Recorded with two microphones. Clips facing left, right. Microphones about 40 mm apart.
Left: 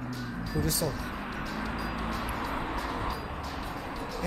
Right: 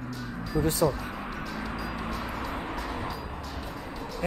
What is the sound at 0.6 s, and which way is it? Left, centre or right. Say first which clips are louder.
Speech: right 5 dB; right.